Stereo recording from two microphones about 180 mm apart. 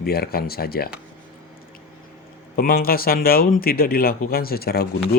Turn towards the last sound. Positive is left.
turn(degrees=60)  # may be behind; listen again after turning